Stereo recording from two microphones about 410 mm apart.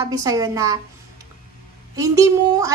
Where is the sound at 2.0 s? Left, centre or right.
Centre.